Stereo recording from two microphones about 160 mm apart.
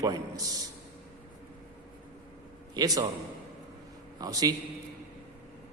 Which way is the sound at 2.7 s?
25° right (ahead or behind).